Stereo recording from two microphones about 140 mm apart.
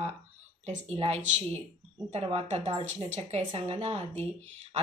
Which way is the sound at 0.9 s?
45° right (ahead or behind).